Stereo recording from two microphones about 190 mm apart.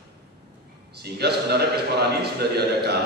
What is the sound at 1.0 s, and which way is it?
A man's voice, 60° right (ahead or behind).